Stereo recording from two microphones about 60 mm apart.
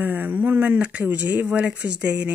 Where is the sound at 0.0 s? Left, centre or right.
Right.